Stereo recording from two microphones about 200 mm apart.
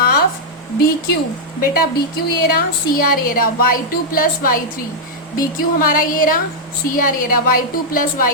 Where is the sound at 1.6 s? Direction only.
50° left (ahead or behind).